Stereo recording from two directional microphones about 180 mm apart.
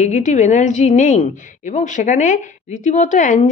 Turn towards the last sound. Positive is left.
turn(degrees=45)  # may be behind; listen again after turning